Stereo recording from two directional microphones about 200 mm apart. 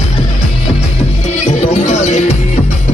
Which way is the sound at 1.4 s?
35° left (ahead or behind).